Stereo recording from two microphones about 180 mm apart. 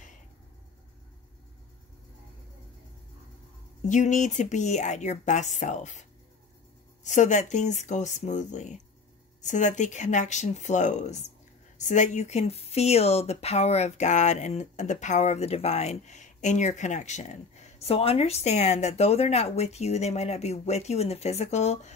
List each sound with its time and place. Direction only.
3.8 s speech: 45° left (ahead or behind)